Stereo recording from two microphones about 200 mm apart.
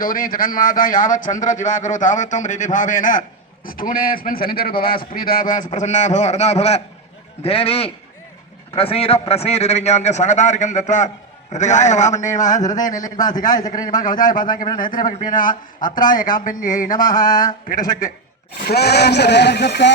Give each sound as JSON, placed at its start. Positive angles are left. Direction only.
{"t": 0.0, "sound": "a man's voice", "side_deg": 45}
{"t": 13.1, "sound": "a man's voice", "side_deg": 20}
{"t": 14.0, "sound": "speech", "side_deg": 40}